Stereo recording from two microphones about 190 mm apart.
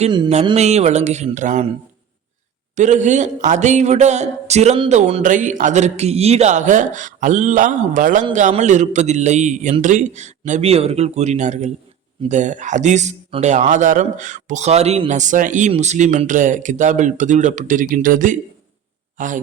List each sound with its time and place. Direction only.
0.0 s speech: 30° right (ahead or behind)
2.7 s a man's voice: 40° right (ahead or behind)